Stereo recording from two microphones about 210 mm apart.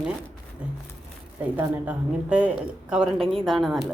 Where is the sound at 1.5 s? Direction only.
5° right (ahead or behind).